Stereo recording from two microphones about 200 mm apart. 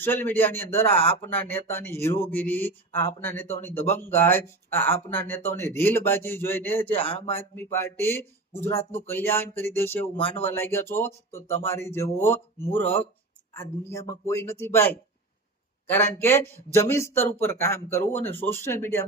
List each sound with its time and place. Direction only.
0.0 s speech: 10° left (ahead or behind)
10.2 s speech: 30° left (ahead or behind)
10.5 s speech: 10° left (ahead or behind)